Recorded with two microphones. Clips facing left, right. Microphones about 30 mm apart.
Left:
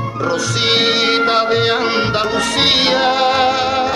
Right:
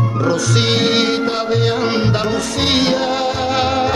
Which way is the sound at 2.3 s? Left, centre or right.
Left.